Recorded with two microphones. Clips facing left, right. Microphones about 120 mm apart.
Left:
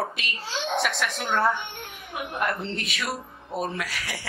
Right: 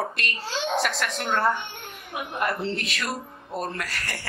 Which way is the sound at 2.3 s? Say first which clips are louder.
Right 2 dB; centre (ahead or behind).